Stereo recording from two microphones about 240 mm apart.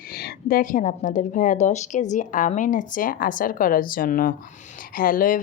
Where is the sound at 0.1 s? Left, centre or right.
Left.